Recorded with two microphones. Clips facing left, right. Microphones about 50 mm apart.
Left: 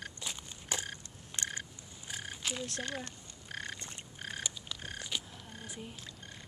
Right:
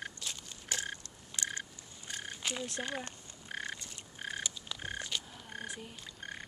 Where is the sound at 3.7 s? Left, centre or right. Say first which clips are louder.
Left 2 dB; left.